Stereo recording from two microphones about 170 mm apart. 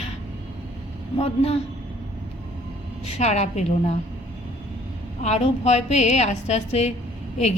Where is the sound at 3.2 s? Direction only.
40° left (ahead or behind).